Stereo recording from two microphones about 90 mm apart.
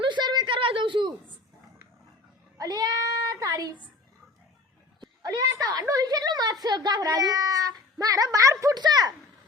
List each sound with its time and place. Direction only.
0.0 s a sound: 60° right (ahead or behind)
2.6 s speech: 45° right (ahead or behind)
4.9 s a child's voice: 45° right (ahead or behind)